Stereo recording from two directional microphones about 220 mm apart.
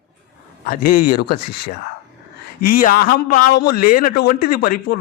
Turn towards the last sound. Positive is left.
turn(degrees=40)  # may be behind; listen again after turning